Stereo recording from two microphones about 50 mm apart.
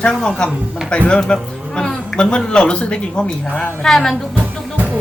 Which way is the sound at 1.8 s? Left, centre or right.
Centre.